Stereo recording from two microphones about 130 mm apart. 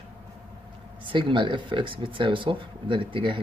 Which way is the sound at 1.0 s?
40° right (ahead or behind).